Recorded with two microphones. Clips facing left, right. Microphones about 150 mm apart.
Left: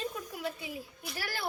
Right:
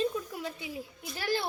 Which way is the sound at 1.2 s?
20° right (ahead or behind).